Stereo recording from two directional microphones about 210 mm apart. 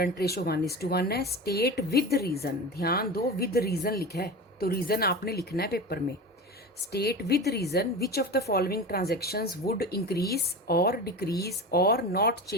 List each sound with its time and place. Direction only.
0.0 s a woman's voice: 50° left (ahead or behind)